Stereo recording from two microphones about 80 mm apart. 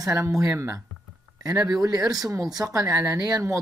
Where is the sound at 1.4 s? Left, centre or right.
Right.